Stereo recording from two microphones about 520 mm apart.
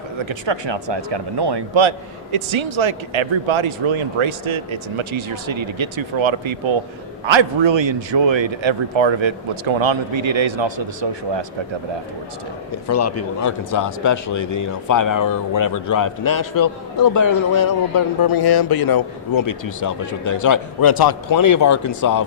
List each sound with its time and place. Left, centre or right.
0.3 s a man's voice: right
12.9 s speech: left